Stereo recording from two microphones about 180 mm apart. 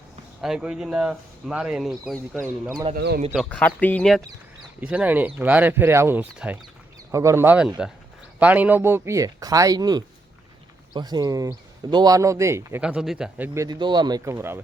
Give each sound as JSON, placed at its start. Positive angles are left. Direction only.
{"t": 0.4, "sound": "speech", "side_deg": -5}
{"t": 2.9, "sound": "speech", "side_deg": -65}
{"t": 3.3, "sound": "speech", "side_deg": 5}
{"t": 4.8, "sound": "a man's voice", "side_deg": -5}